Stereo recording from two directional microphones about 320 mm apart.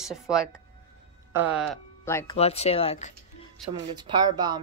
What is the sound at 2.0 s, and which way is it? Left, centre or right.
Speech, centre.